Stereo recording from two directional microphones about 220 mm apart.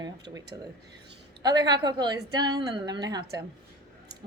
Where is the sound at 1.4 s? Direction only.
20° right (ahead or behind).